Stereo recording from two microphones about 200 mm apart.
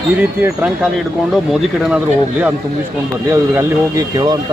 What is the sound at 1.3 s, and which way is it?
Speech, centre (ahead or behind).